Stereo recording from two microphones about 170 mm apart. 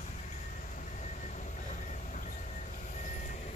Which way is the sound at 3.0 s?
50° left (ahead or behind).